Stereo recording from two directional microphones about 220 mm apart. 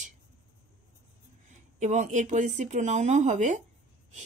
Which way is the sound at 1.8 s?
35° right (ahead or behind).